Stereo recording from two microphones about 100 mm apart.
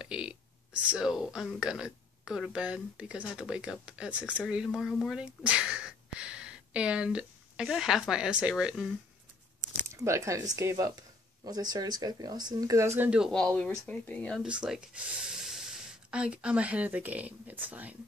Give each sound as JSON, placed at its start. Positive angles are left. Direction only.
{"t": 0.0, "sound": "a sound", "side_deg": -10}
{"t": 0.8, "sound": "speech", "side_deg": -5}
{"t": 4.6, "sound": "speech", "side_deg": 0}
{"t": 5.1, "sound": "speech", "side_deg": -10}
{"t": 9.8, "sound": "speech", "side_deg": -30}
{"t": 13.0, "sound": "speech", "side_deg": -10}
{"t": 13.3, "sound": "speech", "side_deg": 10}
{"t": 14.4, "sound": "speech", "side_deg": -10}